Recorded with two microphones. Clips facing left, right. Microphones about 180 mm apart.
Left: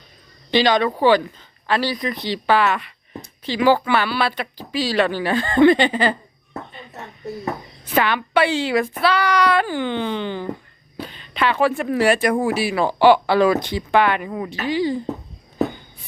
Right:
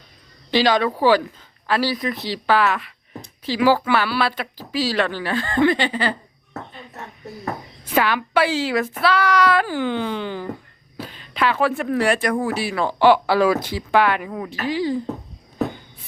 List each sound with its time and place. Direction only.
0.5 s speech: 5° right (ahead or behind)
5.1 s speech: 20° left (ahead or behind)
7.9 s speech: 5° right (ahead or behind)